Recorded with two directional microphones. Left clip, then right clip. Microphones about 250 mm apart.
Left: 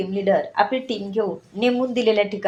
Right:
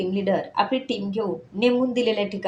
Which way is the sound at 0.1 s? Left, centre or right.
Centre.